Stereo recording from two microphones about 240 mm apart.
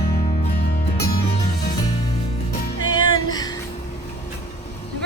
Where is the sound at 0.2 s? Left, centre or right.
Left.